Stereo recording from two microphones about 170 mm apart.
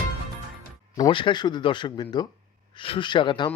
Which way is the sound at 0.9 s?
25° left (ahead or behind).